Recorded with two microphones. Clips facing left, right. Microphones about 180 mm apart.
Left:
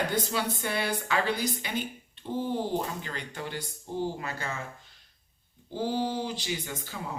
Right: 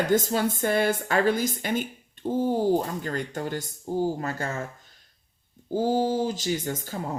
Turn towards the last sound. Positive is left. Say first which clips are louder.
# right 6 dB
turn(degrees=-45)  # may be behind; listen again after turning